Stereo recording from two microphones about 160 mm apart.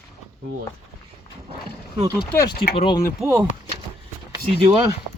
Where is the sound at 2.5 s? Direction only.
90° left.